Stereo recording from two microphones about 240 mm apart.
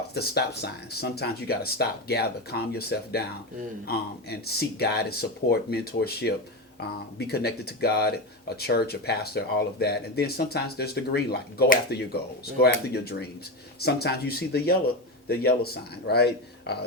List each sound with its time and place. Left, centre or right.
0.1 s speech: left